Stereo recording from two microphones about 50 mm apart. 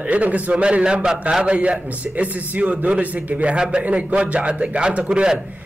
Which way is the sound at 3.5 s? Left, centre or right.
Centre.